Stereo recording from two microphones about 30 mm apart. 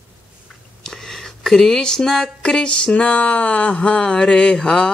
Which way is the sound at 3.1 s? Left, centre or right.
Left.